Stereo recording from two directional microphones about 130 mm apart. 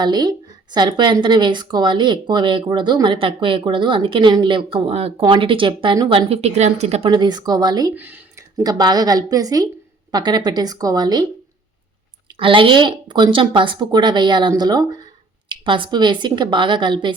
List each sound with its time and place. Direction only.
0.0 s a woman's voice: 35° right (ahead or behind); by 7.1 s 55° right (ahead or behind)
7.1 s a woman's voice: 35° right (ahead or behind)
7.9 s a sound: 15° right (ahead or behind)
8.6 s a woman's voice: 30° right (ahead or behind)
12.4 s a woman's voice: 40° right (ahead or behind)